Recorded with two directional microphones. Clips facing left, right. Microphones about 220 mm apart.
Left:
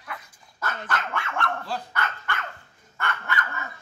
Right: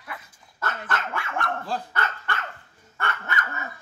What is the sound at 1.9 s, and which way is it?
Dog, 30° right (ahead or behind).